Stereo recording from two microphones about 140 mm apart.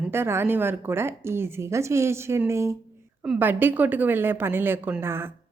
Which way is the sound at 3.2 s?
10° right (ahead or behind).